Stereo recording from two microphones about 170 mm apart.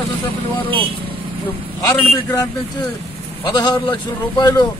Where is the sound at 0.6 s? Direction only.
10° left (ahead or behind).